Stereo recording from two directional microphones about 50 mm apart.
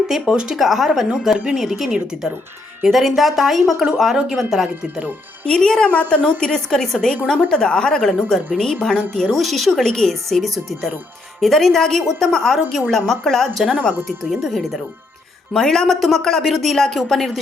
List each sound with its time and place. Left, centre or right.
0.1 s a woman's voice: centre
5.5 s a woman's voice: centre
5.9 s a woman's voice: left
6.4 s a woman's voice: centre
15.5 s a woman's voice: centre
16.0 s a woman's voice: centre
16.5 s a woman's voice: centre
16.7 s a woman's voice: centre